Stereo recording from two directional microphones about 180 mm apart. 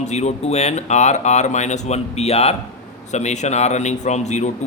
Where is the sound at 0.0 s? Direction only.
40° left (ahead or behind).